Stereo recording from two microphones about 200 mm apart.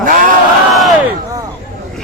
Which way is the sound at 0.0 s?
45° right (ahead or behind).